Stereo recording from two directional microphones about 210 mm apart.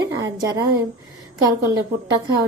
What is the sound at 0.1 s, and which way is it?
Speech, 15° right (ahead or behind).